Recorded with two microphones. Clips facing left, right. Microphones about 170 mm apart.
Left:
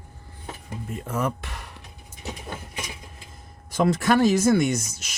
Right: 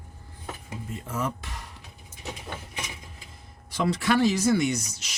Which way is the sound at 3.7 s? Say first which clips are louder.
Left 4 dB; 45° left (ahead or behind).